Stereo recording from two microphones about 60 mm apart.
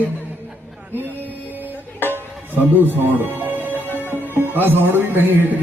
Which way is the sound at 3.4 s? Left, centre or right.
Right.